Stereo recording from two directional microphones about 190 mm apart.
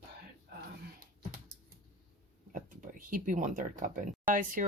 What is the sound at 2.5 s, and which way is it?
Speech, 45° right (ahead or behind).